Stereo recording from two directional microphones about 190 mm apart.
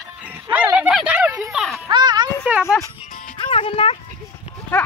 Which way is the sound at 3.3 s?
25° left (ahead or behind).